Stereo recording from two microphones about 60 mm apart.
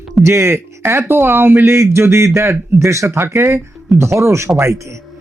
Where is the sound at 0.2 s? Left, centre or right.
Right.